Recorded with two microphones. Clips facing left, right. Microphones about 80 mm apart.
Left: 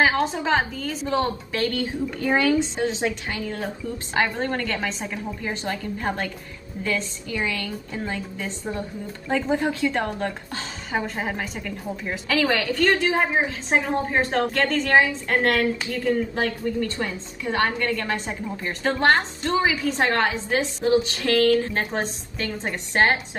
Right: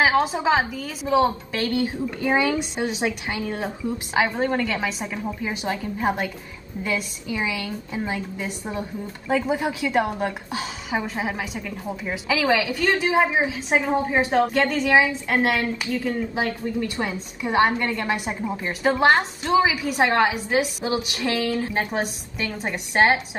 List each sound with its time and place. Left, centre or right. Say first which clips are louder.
0.2 s a woman's voice: right 1 dB; centre; by 3.9 s right
4.1 s a woman's voice: right 2 dB; centre